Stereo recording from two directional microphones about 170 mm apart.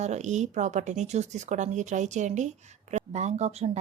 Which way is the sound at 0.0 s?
45° right (ahead or behind).